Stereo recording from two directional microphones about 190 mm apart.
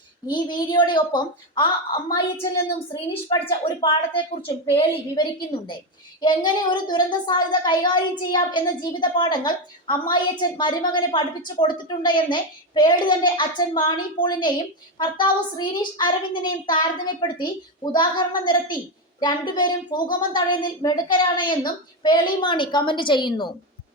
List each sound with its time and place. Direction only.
0.3 s a woman's voice: 25° left (ahead or behind)